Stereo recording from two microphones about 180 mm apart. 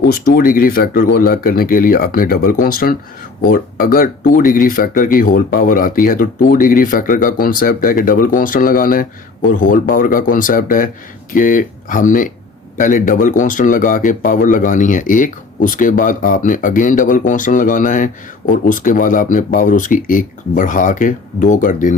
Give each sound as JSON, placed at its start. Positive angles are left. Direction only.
{"t": 0.0, "sound": "speech", "side_deg": 55}